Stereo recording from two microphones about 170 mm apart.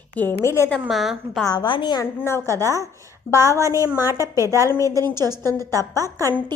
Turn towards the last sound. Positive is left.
turn(degrees=-20)  # may be behind; listen again after turning